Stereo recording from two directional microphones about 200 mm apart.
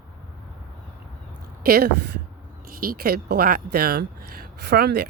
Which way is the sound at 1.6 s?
50° right (ahead or behind).